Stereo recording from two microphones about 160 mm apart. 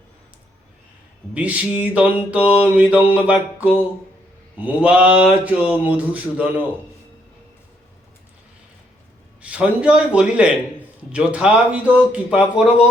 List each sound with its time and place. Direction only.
1.3 s speech: 10° right (ahead or behind)
9.4 s speech: 5° right (ahead or behind)